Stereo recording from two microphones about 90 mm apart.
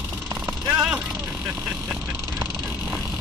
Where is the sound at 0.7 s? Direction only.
15° right (ahead or behind).